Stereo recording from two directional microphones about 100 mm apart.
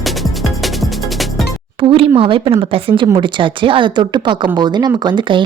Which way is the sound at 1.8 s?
65° right (ahead or behind).